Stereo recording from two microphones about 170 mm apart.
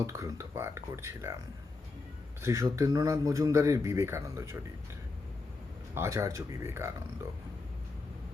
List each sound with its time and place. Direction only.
0.0 s speech: 20° right (ahead or behind)
2.4 s speech: 20° right (ahead or behind)
5.9 s speech: 15° right (ahead or behind)